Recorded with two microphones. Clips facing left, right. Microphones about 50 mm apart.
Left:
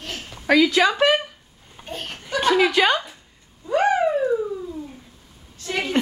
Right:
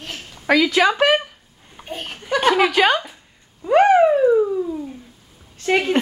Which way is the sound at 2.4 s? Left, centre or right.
Right.